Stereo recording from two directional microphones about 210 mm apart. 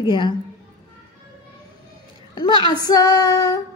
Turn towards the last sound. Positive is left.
turn(degrees=15)  # may be behind; listen again after turning